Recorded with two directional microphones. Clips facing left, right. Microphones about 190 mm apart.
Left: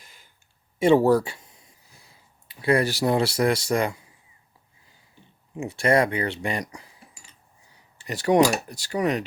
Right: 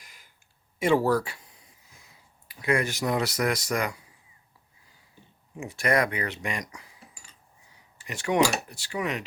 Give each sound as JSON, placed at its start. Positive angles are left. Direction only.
{"t": 0.0, "sound": "a sound", "side_deg": 25}
{"t": 0.8, "sound": "speech", "side_deg": 25}
{"t": 5.5, "sound": "speech", "side_deg": 25}
{"t": 7.9, "sound": "speech", "side_deg": 35}